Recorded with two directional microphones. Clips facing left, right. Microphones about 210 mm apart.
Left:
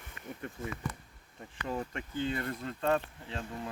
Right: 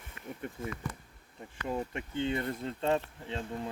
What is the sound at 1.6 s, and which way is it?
Speech, 15° right (ahead or behind).